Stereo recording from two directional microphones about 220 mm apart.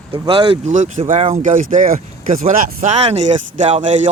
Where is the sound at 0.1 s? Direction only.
25° right (ahead or behind).